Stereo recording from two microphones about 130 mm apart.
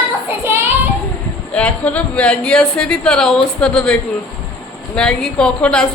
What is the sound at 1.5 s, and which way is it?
A woman's voice, 10° left (ahead or behind).